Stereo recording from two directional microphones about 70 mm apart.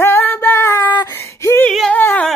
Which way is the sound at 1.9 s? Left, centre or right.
Left.